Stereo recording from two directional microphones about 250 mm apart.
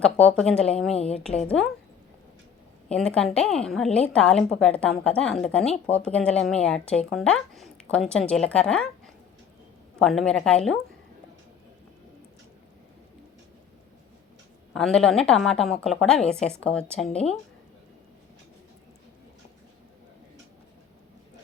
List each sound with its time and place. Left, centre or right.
0.0 s speech: centre
0.9 s a woman's voice: left
1.5 s speech: centre
2.9 s speech: centre
10.0 s speech: centre
14.7 s speech: centre